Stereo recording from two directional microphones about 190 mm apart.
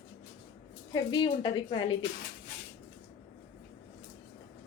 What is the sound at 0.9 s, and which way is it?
A woman's voice, 25° left (ahead or behind).